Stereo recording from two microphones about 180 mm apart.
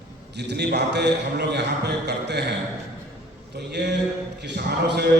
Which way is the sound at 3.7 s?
70° right (ahead or behind).